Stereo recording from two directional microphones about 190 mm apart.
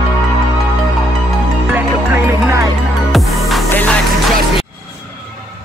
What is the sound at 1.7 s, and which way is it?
Music, 15° right (ahead or behind).